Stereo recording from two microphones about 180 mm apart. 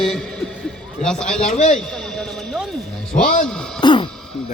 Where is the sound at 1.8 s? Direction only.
5° left (ahead or behind).